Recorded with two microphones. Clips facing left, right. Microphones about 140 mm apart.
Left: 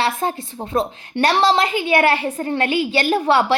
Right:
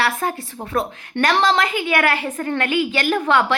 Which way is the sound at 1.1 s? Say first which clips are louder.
Left 1 dB; 35° left (ahead or behind).